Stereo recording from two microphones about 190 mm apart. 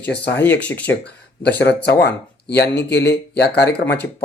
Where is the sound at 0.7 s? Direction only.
5° left (ahead or behind).